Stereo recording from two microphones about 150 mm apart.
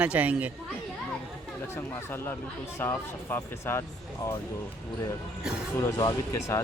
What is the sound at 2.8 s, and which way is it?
Speech, 15° left (ahead or behind).